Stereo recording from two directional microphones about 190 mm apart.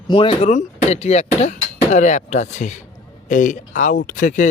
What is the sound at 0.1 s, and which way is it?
Speech, 30° left (ahead or behind).